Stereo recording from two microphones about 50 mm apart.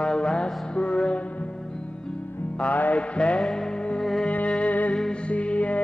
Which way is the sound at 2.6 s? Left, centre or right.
Left.